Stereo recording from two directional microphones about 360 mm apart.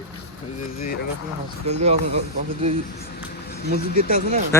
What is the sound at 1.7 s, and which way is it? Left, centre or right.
Speech, centre.